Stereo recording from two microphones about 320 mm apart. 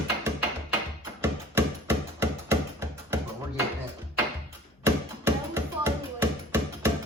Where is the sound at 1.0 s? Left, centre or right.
Centre.